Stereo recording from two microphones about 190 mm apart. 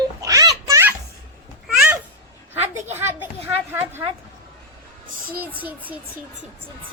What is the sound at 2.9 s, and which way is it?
Speech, 10° right (ahead or behind).